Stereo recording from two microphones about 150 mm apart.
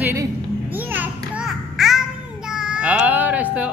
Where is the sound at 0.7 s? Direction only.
10° right (ahead or behind).